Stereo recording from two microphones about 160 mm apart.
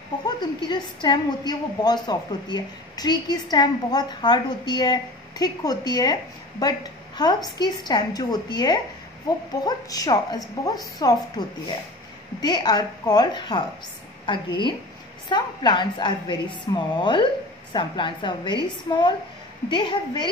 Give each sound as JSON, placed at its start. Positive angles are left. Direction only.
{"t": 0.4, "sound": "a woman's voice", "side_deg": 30}